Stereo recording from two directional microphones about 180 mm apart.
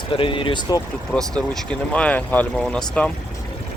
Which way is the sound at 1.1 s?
5° left (ahead or behind).